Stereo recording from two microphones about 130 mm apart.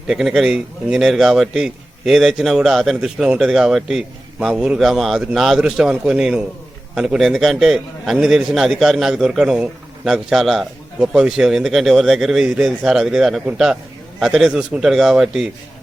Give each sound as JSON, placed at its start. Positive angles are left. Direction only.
{"t": 0.1, "sound": "a man's voice", "side_deg": 0}